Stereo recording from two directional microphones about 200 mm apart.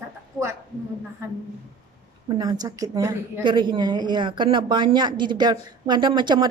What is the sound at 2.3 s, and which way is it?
A woman's voice, 20° right (ahead or behind).